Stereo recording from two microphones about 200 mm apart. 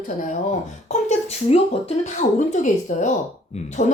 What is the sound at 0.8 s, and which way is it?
Speech, 35° left (ahead or behind).